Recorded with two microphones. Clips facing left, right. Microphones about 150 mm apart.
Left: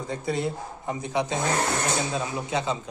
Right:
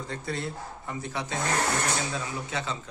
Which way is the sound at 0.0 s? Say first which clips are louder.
Left 6 dB; 15° left (ahead or behind).